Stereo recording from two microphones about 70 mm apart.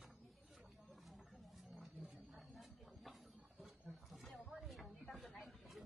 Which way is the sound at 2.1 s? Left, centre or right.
Centre.